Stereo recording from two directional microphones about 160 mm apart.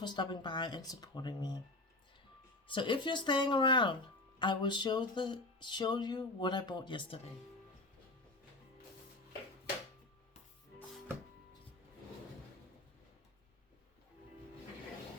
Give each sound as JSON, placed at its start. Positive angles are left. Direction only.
{"t": 0.0, "sound": "speech", "side_deg": 30}
{"t": 2.6, "sound": "speech", "side_deg": 30}